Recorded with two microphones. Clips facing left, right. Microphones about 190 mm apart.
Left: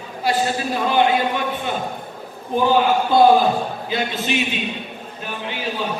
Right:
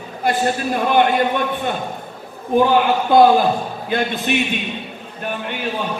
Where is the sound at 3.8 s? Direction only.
55° right (ahead or behind).